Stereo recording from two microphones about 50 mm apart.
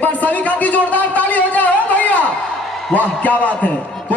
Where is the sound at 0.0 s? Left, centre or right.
Left.